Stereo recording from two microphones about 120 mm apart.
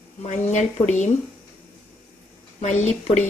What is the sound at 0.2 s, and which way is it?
Speech, 80° left.